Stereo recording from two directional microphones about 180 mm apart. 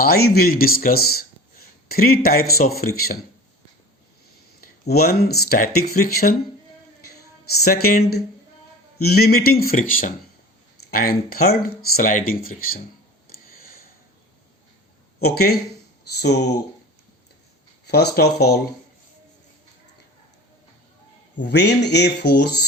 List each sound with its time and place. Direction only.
0.0 s speech: 60° left (ahead or behind)
4.6 s speech: 60° left (ahead or behind)
13.4 s a sound: 55° left (ahead or behind)
15.2 s speech: 60° left (ahead or behind)
17.8 s speech: 65° left (ahead or behind)
21.3 s speech: 75° left (ahead or behind)